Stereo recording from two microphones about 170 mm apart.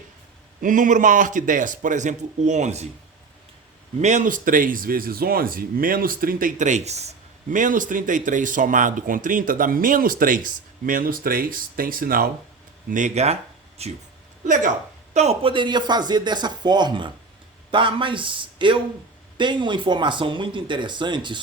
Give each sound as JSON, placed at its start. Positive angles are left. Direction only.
{"t": 0.6, "sound": "speech", "side_deg": -50}
{"t": 4.0, "sound": "speech", "side_deg": -45}
{"t": 12.9, "sound": "speech", "side_deg": -45}
{"t": 14.4, "sound": "speech", "side_deg": -50}